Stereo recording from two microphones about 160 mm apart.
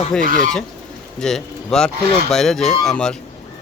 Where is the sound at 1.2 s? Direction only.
5° left (ahead or behind).